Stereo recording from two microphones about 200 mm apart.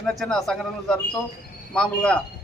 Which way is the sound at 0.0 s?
Centre (ahead or behind).